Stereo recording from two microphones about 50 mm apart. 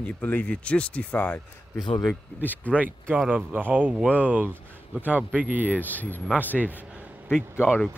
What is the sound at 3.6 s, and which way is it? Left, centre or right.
Speech, right.